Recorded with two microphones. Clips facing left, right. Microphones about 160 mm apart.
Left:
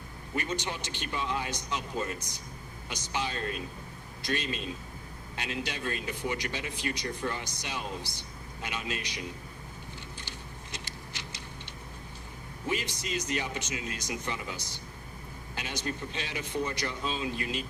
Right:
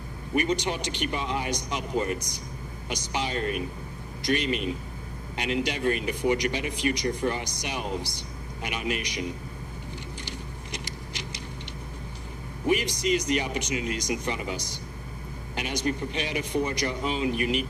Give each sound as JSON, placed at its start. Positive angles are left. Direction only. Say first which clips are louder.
{"t": 0.3, "sound": "speech", "louder": "right 8 dB", "side_deg": -15}
{"t": 10.2, "sound": "vehicle", "louder": "right 6 dB", "side_deg": -15}
{"t": 12.6, "sound": "speech", "louder": "right 9 dB", "side_deg": -15}